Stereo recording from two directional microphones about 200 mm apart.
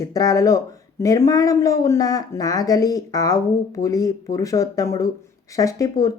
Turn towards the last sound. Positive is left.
turn(degrees=15)  # may be behind; listen again after turning